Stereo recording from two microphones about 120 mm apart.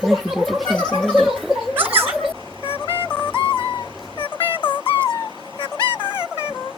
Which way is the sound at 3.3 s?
40° left (ahead or behind).